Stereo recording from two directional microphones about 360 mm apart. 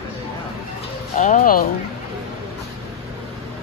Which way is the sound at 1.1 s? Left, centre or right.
Left.